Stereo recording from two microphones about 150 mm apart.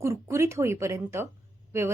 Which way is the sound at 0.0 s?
20° right (ahead or behind).